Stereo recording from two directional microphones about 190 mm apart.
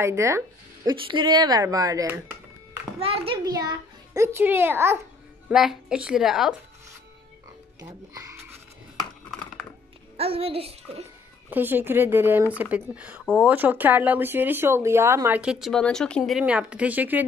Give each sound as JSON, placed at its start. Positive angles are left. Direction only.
{"t": 0.0, "sound": "speech", "side_deg": -15}
{"t": 0.8, "sound": "speech", "side_deg": -25}
{"t": 3.0, "sound": "a child's voice", "side_deg": -30}
{"t": 3.4, "sound": "a woman's voice", "side_deg": -20}
{"t": 7.8, "sound": "music", "side_deg": -20}
{"t": 10.1, "sound": "a child's voice", "side_deg": -30}
{"t": 11.5, "sound": "speech", "side_deg": -10}